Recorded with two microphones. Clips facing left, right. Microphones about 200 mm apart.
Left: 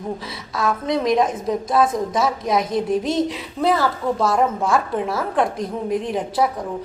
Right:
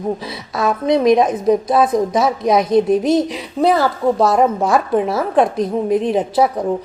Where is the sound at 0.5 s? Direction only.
20° right (ahead or behind).